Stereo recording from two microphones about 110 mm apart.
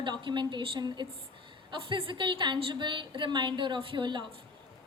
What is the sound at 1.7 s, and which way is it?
A woman's voice, 50° right (ahead or behind).